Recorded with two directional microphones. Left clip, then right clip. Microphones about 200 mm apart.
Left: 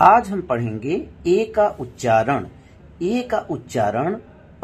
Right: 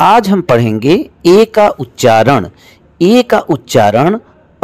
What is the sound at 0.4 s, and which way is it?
A woman's voice, 45° right (ahead or behind).